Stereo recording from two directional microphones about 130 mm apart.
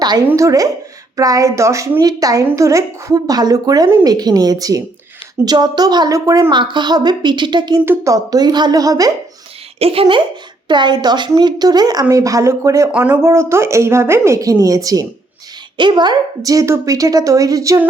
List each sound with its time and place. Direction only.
0.0 s a woman's voice: 30° right (ahead or behind)
9.7 s a woman's voice: 50° right (ahead or behind); by 12.9 s 25° right (ahead or behind)
12.9 s a woman's voice: 15° right (ahead or behind)